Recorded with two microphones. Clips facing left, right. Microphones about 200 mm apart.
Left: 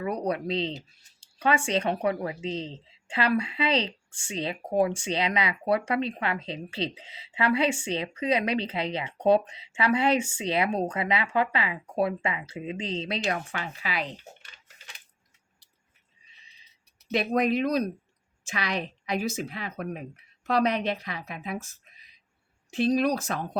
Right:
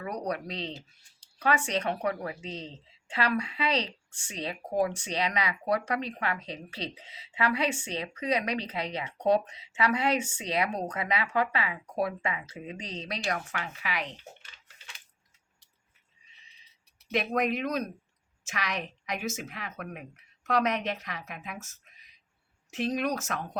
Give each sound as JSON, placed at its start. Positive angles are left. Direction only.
{"t": 0.1, "sound": "speech", "side_deg": 30}
{"t": 17.1, "sound": "speech", "side_deg": 35}